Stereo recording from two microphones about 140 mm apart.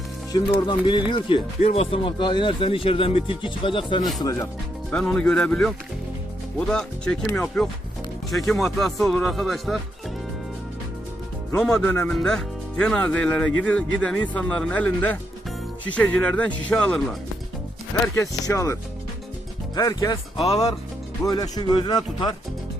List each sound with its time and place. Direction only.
0.3 s speech: 35° left (ahead or behind)
4.2 s speech: 25° left (ahead or behind)
4.9 s speech: 5° left (ahead or behind)
11.5 s speech: 5° left (ahead or behind)
18.1 s speech: 20° left (ahead or behind)
21.3 s speech: 25° left (ahead or behind)